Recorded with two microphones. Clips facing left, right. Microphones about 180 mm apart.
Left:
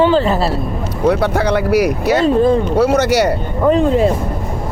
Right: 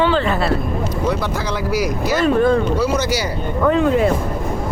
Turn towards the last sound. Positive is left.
turn(degrees=25)  # may be behind; listen again after turning